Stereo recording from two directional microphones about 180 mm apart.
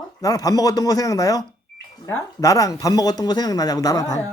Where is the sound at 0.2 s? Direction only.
20° left (ahead or behind).